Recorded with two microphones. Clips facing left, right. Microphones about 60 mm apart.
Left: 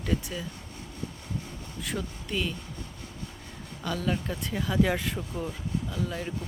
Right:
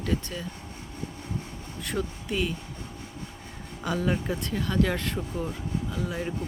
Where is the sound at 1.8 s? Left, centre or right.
Centre.